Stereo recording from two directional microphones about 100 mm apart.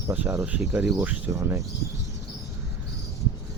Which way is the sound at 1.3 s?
30° right (ahead or behind).